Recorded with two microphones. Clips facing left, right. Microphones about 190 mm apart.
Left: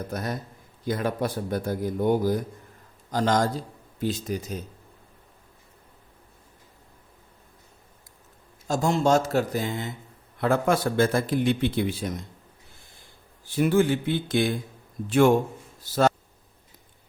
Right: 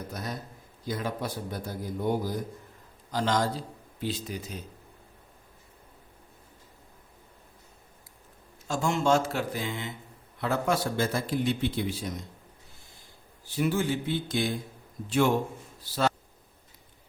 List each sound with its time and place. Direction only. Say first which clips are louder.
0.1 s speech: left 5 dB; 55° left (ahead or behind)
3.1 s speech: left 4 dB; 45° left (ahead or behind)
8.6 s a man's voice: left 4 dB; 40° left (ahead or behind)
10.4 s speech: left 5 dB; 55° left (ahead or behind)
13.6 s speech: left 6 dB; 55° left (ahead or behind)
15.8 s speech: left 6 dB; 45° left (ahead or behind)